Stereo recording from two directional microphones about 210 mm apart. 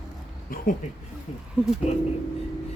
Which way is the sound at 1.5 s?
5° right (ahead or behind).